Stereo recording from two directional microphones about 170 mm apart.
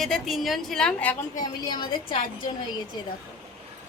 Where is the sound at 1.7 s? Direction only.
30° left (ahead or behind).